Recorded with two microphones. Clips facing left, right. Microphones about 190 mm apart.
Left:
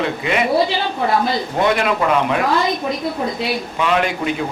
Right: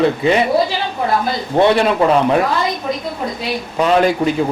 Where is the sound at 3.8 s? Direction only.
35° right (ahead or behind).